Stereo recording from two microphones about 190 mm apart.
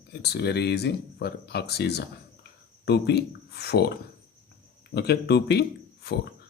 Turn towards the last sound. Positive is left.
turn(degrees=60)  # may be behind; listen again after turning